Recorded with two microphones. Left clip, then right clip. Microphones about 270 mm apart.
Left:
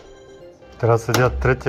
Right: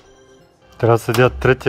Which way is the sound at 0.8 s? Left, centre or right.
Right.